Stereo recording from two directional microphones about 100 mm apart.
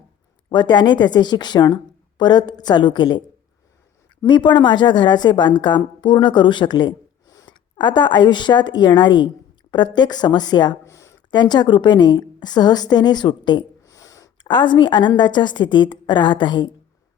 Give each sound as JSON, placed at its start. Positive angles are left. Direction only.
{"t": 0.5, "sound": "a woman's voice", "side_deg": 50}
{"t": 4.3, "sound": "a woman's voice", "side_deg": 50}
{"t": 10.8, "sound": "a sound", "side_deg": 30}
{"t": 11.3, "sound": "a woman's voice", "side_deg": 45}
{"t": 13.8, "sound": "a sound", "side_deg": 35}
{"t": 14.4, "sound": "a woman's voice", "side_deg": 50}